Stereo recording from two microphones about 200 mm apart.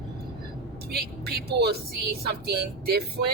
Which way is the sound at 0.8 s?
50° right (ahead or behind).